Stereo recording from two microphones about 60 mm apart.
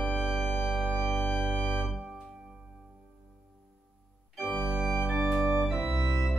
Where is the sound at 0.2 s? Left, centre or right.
Centre.